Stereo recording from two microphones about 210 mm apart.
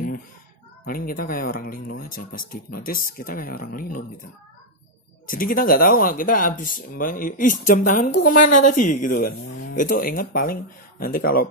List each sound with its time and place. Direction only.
0.8 s speech: 45° left (ahead or behind)
5.2 s speech: 40° left (ahead or behind)